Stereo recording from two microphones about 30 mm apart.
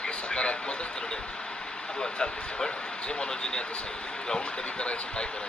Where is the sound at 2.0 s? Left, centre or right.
Left.